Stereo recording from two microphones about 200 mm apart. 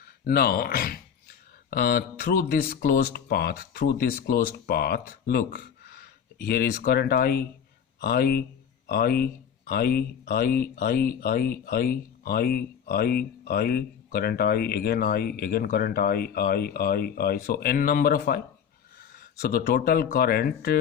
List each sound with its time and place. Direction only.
0.0 s speech: 50° left (ahead or behind)